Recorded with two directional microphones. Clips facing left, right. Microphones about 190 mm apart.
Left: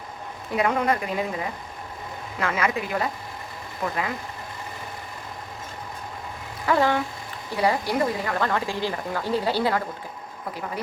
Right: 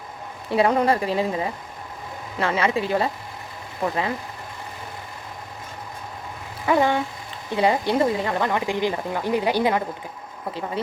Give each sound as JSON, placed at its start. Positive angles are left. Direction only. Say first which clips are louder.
{"t": 0.5, "sound": "speech", "louder": "right 4 dB", "side_deg": -30}
{"t": 6.7, "sound": "speech", "louder": "right 2 dB", "side_deg": -20}